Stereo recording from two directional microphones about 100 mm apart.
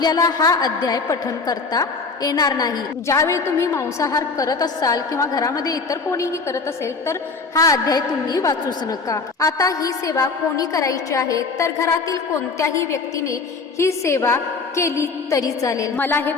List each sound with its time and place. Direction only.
0.0 s a woman's voice: 40° left (ahead or behind)
16.0 s a woman's voice: 20° left (ahead or behind)